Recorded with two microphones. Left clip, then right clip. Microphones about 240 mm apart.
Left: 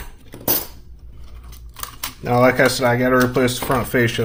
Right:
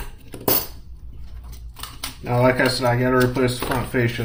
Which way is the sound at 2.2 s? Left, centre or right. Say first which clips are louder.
Left 4 dB; left.